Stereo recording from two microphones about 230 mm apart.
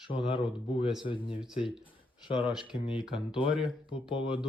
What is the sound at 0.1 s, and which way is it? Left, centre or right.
Speech, left.